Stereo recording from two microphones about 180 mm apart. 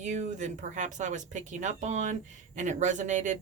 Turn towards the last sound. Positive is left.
turn(degrees=-45)  # may be behind; listen again after turning